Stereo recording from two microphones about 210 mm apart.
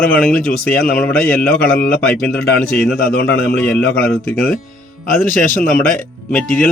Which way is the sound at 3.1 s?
50° left (ahead or behind).